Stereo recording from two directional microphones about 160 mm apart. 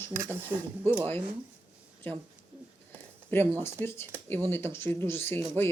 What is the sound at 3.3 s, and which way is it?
Speech, 15° left (ahead or behind).